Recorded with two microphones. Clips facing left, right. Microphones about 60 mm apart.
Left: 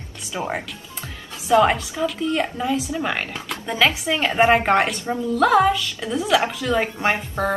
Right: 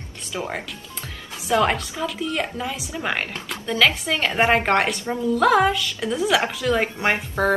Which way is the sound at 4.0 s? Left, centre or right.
Centre.